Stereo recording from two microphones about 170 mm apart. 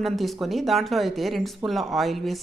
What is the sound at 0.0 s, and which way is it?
Speech, centre (ahead or behind).